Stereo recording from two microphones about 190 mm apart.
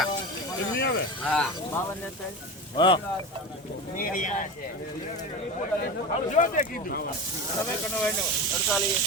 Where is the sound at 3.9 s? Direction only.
45° left (ahead or behind).